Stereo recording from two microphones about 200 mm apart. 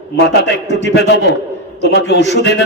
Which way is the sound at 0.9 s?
60° left (ahead or behind).